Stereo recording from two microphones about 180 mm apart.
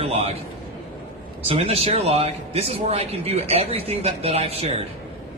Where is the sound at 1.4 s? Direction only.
35° right (ahead or behind).